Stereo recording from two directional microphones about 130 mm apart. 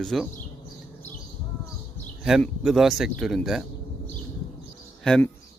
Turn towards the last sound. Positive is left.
turn(degrees=5)  # may be behind; listen again after turning